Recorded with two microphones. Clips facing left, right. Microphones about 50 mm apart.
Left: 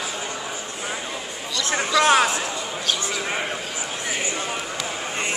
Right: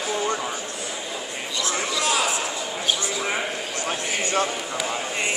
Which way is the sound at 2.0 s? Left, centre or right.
Left.